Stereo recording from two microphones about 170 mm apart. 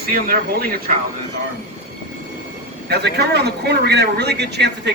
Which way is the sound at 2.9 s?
75° right (ahead or behind).